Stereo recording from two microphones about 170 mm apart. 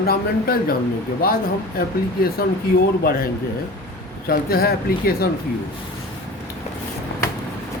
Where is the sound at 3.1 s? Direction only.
60° left (ahead or behind).